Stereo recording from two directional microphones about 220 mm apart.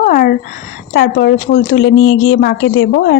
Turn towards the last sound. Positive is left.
turn(degrees=55)  # may be behind; listen again after turning